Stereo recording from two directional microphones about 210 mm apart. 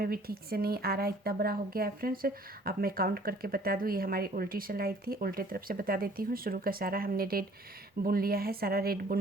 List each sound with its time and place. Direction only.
0.0 s speech: 45° right (ahead or behind)